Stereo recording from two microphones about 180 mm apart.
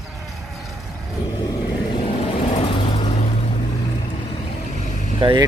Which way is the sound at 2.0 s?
35° left (ahead or behind).